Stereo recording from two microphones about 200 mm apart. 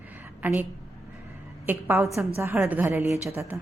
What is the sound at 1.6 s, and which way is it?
A woman's voice, 10° right (ahead or behind).